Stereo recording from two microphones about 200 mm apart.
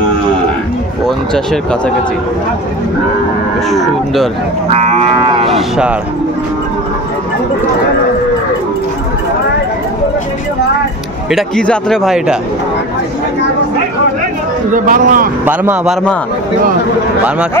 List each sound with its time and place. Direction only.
1.0 s speech: centre (ahead or behind)
3.7 s speech: centre (ahead or behind)
4.6 s moo: 30° right (ahead or behind)
5.5 s speech: 5° right (ahead or behind)
11.2 s speech: centre (ahead or behind)
14.7 s moo: 40° right (ahead or behind)
15.4 s speech: 10° right (ahead or behind)